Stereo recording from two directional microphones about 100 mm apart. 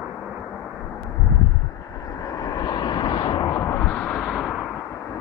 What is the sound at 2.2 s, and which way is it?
Vehicle, 40° left (ahead or behind).